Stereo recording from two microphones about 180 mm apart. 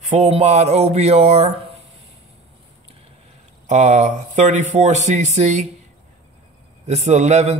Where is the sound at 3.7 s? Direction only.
40° right (ahead or behind).